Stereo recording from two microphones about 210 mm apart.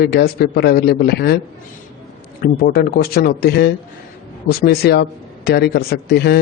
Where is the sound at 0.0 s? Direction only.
50° left (ahead or behind).